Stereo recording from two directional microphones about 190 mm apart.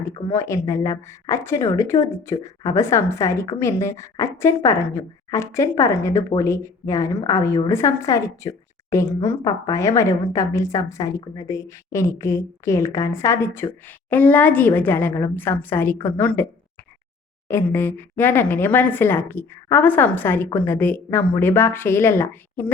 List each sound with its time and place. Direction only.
0.0 s a woman's voice: 15° left (ahead or behind)
17.5 s a woman's voice: 10° left (ahead or behind)